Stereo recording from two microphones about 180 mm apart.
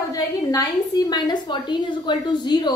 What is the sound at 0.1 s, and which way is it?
A woman's voice, 20° left (ahead or behind).